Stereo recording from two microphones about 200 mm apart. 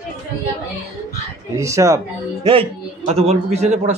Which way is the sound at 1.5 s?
15° right (ahead or behind).